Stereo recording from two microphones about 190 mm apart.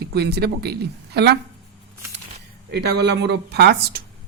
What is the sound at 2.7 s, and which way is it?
Speech, 60° right (ahead or behind).